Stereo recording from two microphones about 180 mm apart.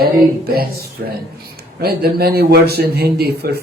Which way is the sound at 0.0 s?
55° right (ahead or behind).